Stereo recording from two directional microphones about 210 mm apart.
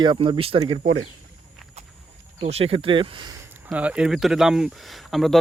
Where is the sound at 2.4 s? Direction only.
30° right (ahead or behind).